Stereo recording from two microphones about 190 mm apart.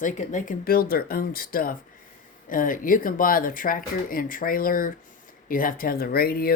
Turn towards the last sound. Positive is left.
turn(degrees=50)  # may be behind; listen again after turning